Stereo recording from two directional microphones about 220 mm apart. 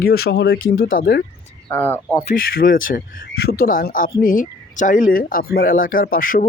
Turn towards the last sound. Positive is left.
turn(degrees=40)  # may be behind; listen again after turning